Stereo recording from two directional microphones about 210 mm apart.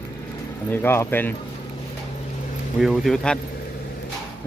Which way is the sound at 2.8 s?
Centre (ahead or behind).